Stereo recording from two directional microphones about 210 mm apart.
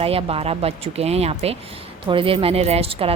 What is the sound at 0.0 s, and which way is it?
Speech, 25° right (ahead or behind).